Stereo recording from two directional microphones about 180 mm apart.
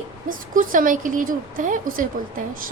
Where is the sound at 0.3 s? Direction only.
50° right (ahead or behind).